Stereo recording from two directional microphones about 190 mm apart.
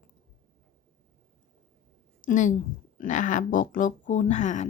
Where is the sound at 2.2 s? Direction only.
45° left (ahead or behind).